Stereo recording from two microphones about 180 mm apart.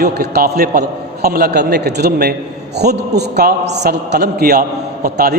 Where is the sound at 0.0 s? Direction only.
60° right (ahead or behind).